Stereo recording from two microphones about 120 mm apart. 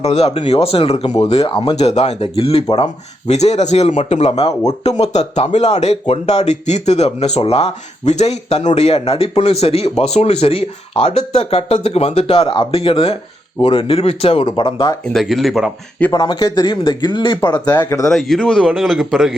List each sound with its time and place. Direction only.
0.0 s speech: 60° left (ahead or behind)
3.2 s speech: 65° left (ahead or behind); by 14.9 s 40° left (ahead or behind)
15.0 s a man's voice: centre (ahead or behind)
16.1 s speech: 35° left (ahead or behind)
17.7 s speech: 25° left (ahead or behind)
18.1 s a man's voice: centre (ahead or behind)